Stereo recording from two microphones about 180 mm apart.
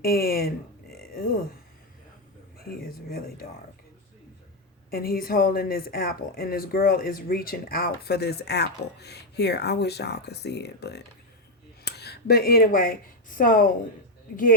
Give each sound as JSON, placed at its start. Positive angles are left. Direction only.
{"t": 0.0, "sound": "speech", "side_deg": 55}
{"t": 0.9, "sound": "a sound", "side_deg": 55}
{"t": 2.6, "sound": "speech", "side_deg": 55}
{"t": 4.9, "sound": "speech", "side_deg": 55}